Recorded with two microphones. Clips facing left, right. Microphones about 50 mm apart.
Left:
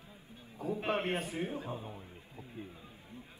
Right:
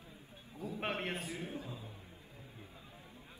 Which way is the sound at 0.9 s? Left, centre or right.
Left.